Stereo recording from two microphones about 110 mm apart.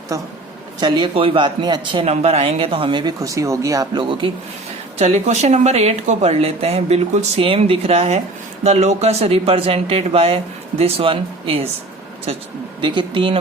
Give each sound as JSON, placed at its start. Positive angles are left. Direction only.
{"t": 0.1, "sound": "speech", "side_deg": -30}
{"t": 1.1, "sound": "a man's voice", "side_deg": -55}
{"t": 2.0, "sound": "speech", "side_deg": -70}
{"t": 4.2, "sound": "a man's voice", "side_deg": -55}
{"t": 4.9, "sound": "speech", "side_deg": -80}
{"t": 7.4, "sound": "speech", "side_deg": -60}
{"t": 8.6, "sound": "speech", "side_deg": -90}
{"t": 12.8, "sound": "a man's voice", "side_deg": -45}